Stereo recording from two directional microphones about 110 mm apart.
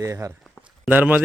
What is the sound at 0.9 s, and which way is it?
Speech, 15° right (ahead or behind).